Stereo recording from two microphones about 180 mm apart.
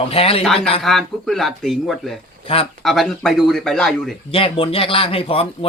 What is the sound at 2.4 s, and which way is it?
Speech, 30° left (ahead or behind).